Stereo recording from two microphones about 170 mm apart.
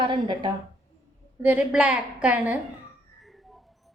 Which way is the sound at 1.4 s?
10° right (ahead or behind).